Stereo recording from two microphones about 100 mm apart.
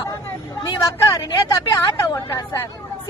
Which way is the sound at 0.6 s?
35° left (ahead or behind).